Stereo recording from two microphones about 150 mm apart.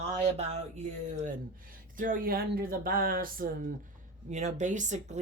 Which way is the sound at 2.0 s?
65° right (ahead or behind).